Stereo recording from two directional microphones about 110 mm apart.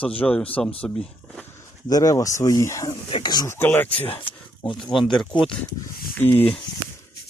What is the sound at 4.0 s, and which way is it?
Speech, 55° left (ahead or behind).